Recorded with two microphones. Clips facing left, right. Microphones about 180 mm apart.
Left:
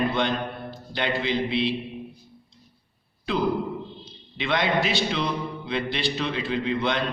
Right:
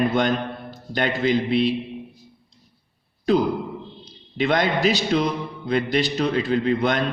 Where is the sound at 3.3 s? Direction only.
40° right (ahead or behind).